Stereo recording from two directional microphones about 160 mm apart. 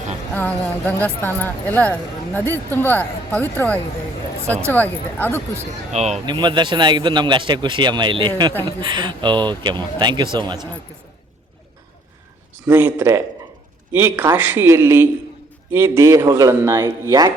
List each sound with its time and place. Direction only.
0.3 s a woman's voice: 10° left (ahead or behind)
5.9 s speech: 45° right (ahead or behind)
6.2 s speech: 30° right (ahead or behind)
12.6 s a man's voice: 10° right (ahead or behind)